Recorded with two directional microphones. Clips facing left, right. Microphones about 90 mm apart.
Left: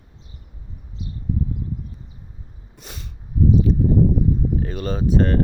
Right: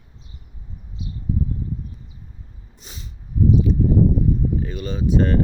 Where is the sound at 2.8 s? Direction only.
55° left (ahead or behind).